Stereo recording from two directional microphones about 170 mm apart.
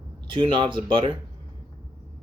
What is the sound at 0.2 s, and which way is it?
Speech, 30° right (ahead or behind).